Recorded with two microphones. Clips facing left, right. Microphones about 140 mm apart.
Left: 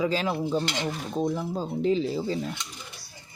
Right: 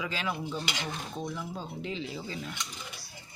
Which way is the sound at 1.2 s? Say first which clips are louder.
Left 12 dB; 40° left (ahead or behind).